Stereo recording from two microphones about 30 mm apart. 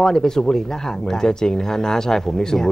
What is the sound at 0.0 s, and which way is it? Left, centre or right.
Speech, centre.